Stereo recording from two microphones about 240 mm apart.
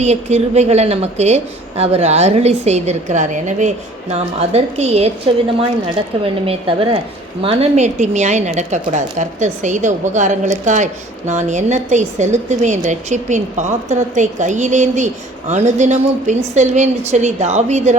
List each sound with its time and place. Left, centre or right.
0.0 s a woman's voice: right
6.2 s a woman's voice: right